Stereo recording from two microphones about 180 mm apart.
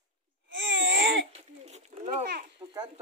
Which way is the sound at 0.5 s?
90° right.